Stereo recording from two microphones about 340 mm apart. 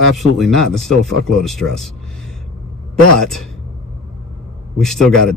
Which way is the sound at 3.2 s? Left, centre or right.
Centre.